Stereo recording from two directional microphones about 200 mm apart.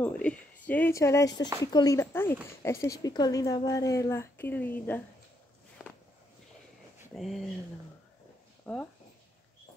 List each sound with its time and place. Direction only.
0.0 s a woman's voice: 5° left (ahead or behind)
5.8 s walk: centre (ahead or behind)
7.2 s speech: centre (ahead or behind)
8.6 s speech: 5° left (ahead or behind)